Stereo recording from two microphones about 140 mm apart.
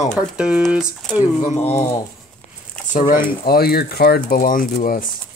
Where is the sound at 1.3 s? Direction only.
50° left (ahead or behind).